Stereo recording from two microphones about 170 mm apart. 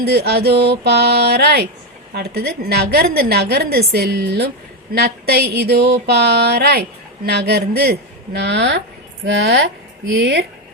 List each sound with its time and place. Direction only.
0.0 s a woman's voice: 70° right (ahead or behind); by 10.4 s 90° right